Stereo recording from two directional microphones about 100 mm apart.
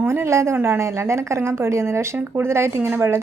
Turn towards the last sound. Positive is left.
turn(degrees=-20)  # may be behind; listen again after turning